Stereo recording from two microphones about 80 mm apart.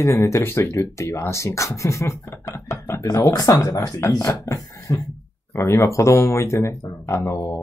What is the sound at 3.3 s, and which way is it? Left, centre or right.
Speech, left.